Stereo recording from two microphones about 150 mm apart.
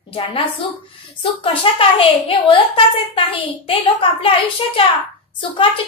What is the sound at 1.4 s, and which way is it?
A woman's voice, 35° left (ahead or behind).